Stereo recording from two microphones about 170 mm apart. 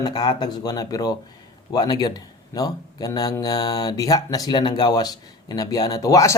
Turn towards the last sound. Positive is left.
turn(degrees=20)  # may be behind; listen again after turning